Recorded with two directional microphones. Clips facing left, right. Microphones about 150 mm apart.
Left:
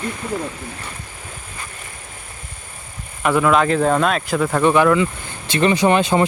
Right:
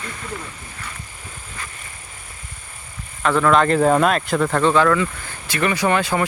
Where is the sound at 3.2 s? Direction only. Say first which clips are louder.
Even; 10° left (ahead or behind).